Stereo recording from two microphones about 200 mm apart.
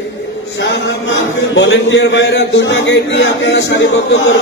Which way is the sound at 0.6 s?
65° left (ahead or behind).